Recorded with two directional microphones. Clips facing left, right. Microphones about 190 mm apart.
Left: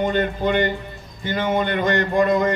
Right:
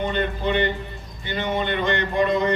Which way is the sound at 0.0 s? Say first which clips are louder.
Left 4 dB; 45° left (ahead or behind).